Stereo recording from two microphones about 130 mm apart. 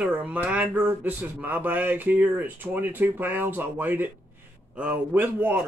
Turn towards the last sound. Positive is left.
turn(degrees=-15)  # may be behind; listen again after turning